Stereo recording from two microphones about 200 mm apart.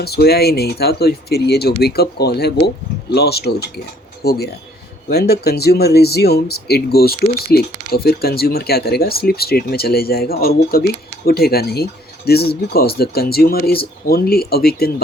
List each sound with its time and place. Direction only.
0.0 s speech: 50° left (ahead or behind)